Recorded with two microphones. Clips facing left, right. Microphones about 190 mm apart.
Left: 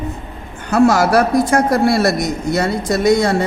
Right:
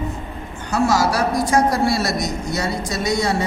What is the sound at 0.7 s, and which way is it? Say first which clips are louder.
A man's voice: left 6 dB; 60° left (ahead or behind).